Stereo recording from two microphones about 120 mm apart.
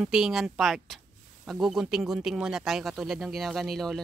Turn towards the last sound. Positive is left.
turn(degrees=0)  # may be behind; listen again after turning